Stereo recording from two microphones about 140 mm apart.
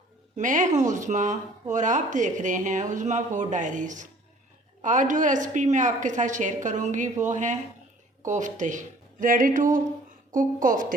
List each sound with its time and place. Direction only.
0.3 s speech: 65° right (ahead or behind)
9.2 s speech: 75° right (ahead or behind)